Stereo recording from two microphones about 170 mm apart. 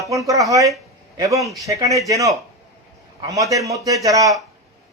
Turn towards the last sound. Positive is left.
turn(degrees=-20)  # may be behind; listen again after turning